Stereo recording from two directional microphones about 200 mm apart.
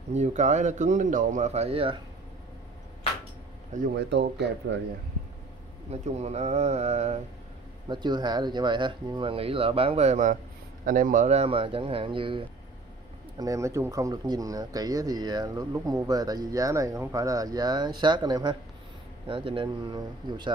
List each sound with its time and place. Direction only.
0.1 s speech: 35° right (ahead or behind)
3.9 s speech: 60° right (ahead or behind)
5.9 s speech: 35° right (ahead or behind)
7.9 s speech: 20° right (ahead or behind)
13.4 s speech: 15° right (ahead or behind)